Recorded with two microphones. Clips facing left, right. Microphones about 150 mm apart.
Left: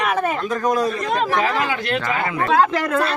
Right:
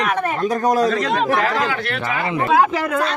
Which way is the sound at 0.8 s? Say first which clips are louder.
Right 3 dB; 90° right.